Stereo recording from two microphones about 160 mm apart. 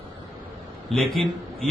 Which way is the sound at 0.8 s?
Centre (ahead or behind).